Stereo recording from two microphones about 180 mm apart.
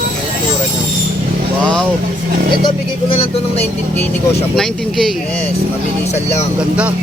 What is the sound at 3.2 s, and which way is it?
Speech, 35° left (ahead or behind).